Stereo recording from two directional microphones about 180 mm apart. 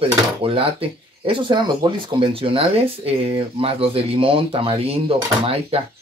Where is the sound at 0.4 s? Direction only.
30° right (ahead or behind).